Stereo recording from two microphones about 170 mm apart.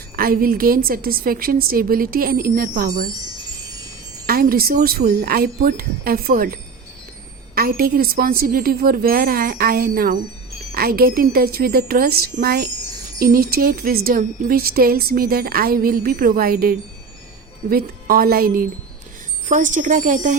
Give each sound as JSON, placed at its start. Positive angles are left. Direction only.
{"t": 0.2, "sound": "speech", "side_deg": -60}
{"t": 4.3, "sound": "speech", "side_deg": -60}
{"t": 19.5, "sound": "speech", "side_deg": -50}